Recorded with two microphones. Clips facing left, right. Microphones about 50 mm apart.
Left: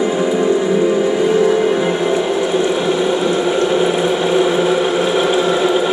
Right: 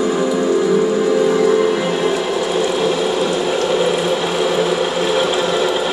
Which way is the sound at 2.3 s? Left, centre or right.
Left.